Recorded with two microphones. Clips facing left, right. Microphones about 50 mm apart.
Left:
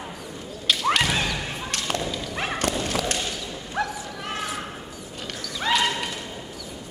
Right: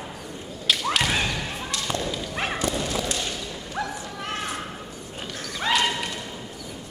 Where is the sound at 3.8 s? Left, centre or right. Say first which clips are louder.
Left 3 dB; left.